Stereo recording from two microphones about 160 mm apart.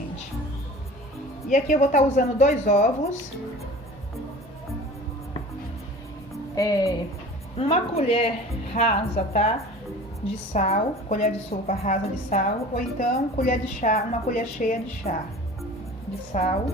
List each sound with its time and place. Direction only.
1.5 s a woman's voice: 50° left (ahead or behind)
6.6 s a woman's voice: 20° left (ahead or behind)
7.6 s a woman's voice: 40° left (ahead or behind)
10.5 s a woman's voice: 50° left (ahead or behind)
13.9 s a woman's voice: 50° left (ahead or behind)
15.1 s a woman's voice: 40° left (ahead or behind)
16.4 s a woman's voice: 50° left (ahead or behind)